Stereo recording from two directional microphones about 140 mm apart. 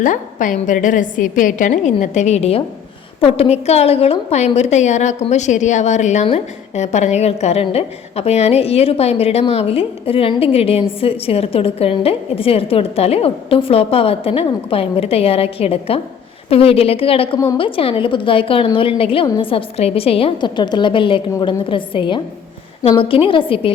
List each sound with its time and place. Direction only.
0.0 s a woman's voice: 65° left (ahead or behind); by 23.7 s 40° left (ahead or behind)